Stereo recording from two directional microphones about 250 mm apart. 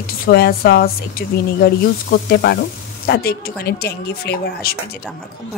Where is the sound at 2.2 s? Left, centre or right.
Left.